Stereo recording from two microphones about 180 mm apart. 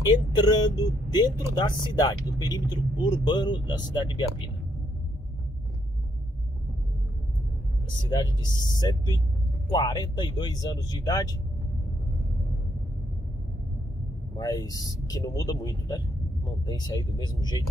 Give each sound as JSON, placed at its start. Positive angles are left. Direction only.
{"t": 0.3, "sound": "speech", "side_deg": 25}
{"t": 8.0, "sound": "speech", "side_deg": 25}
{"t": 14.3, "sound": "speech", "side_deg": 20}